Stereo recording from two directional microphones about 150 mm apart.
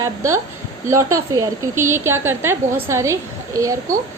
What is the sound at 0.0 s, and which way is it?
A woman's voice, 20° right (ahead or behind).